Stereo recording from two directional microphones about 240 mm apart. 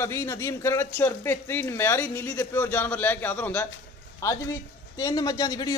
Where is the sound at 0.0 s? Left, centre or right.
Centre.